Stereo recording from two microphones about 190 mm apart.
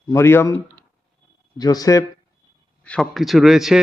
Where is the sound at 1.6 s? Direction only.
20° left (ahead or behind).